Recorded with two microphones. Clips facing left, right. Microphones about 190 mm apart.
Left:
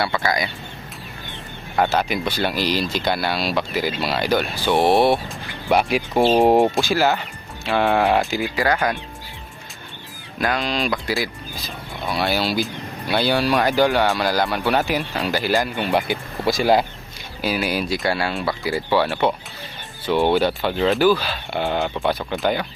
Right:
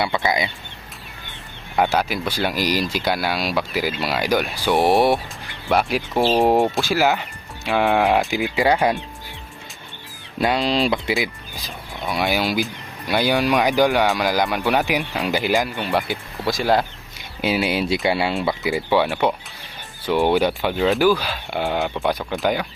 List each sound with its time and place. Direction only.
0.2 s speech: 20° right (ahead or behind)
1.7 s speech: 5° right (ahead or behind)
5.6 s speech: centre (ahead or behind); by 9.0 s 25° right (ahead or behind)
10.3 s speech: 25° right (ahead or behind)
15.8 s speech: centre (ahead or behind)
17.4 s speech: 20° right (ahead or behind)